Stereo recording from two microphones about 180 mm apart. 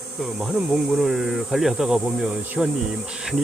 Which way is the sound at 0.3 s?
Centre (ahead or behind).